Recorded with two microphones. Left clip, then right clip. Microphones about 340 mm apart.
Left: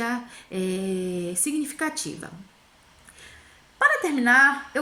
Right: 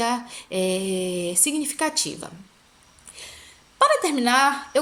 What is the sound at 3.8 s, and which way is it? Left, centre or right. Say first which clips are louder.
A woman's voice: right 2 dB; centre.